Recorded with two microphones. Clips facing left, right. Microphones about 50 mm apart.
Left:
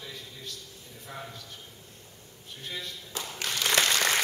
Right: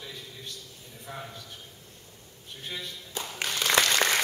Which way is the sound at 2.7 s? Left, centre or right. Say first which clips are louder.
Even; centre.